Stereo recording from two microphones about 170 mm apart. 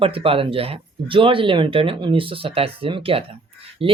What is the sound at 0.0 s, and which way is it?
Speech, 35° right (ahead or behind).